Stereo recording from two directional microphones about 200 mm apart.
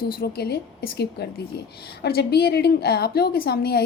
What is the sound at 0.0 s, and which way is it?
A woman's voice, 45° left (ahead or behind).